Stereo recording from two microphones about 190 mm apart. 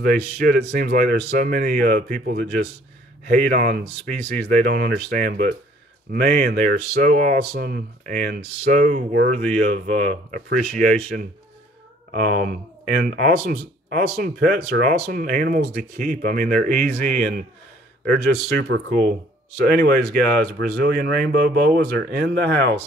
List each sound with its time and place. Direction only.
0.0 s speech: 50° right (ahead or behind)
12.1 s speech: 55° right (ahead or behind)
18.0 s speech: 60° right (ahead or behind)